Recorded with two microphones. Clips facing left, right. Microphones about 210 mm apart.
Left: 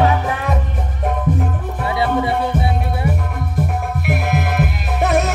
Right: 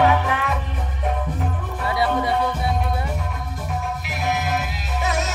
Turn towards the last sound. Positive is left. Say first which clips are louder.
# left 7 dB
turn(degrees=60)  # may be behind; listen again after turning